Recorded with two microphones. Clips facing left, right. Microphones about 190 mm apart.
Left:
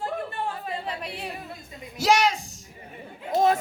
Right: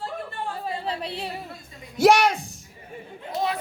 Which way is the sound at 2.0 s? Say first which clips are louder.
Right 4 dB; 60° right (ahead or behind).